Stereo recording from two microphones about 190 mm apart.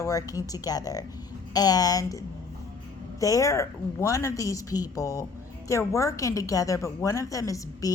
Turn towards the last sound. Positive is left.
turn(degrees=15)  # may be behind; listen again after turning